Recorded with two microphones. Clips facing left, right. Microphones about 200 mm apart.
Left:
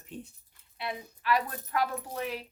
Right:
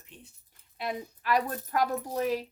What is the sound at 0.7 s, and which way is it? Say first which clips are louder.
Speech: right 3 dB; 40° right (ahead or behind).